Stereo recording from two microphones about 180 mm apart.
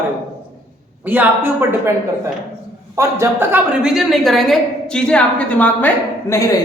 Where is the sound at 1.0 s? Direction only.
10° right (ahead or behind).